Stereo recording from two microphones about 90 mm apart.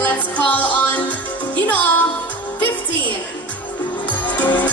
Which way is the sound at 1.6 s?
20° left (ahead or behind).